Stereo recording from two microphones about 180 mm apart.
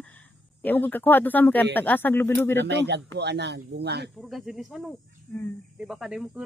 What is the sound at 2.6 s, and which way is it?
Speech, 70° right (ahead or behind).